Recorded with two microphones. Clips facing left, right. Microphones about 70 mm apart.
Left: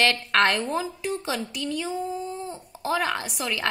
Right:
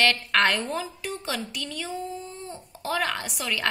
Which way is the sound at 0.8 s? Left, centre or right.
Centre.